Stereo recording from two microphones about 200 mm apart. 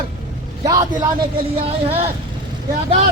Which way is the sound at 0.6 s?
20° right (ahead or behind).